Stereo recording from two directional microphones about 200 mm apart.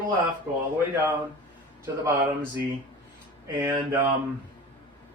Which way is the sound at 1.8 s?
10° right (ahead or behind).